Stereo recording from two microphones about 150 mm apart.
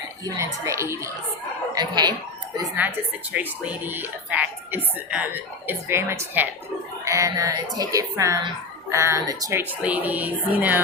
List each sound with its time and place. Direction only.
0.3 s speech: 20° right (ahead or behind)
3.3 s speech: 10° right (ahead or behind)